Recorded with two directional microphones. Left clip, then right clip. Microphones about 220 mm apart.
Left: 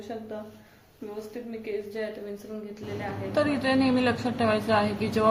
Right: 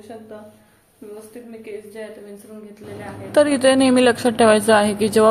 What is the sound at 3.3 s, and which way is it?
A woman's voice, 35° right (ahead or behind).